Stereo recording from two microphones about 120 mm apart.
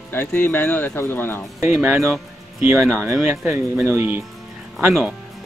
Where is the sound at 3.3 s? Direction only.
20° right (ahead or behind).